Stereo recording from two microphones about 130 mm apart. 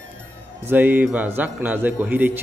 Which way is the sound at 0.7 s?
15° right (ahead or behind).